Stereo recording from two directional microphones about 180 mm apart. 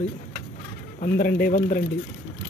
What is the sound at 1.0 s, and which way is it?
Speech, 55° left (ahead or behind).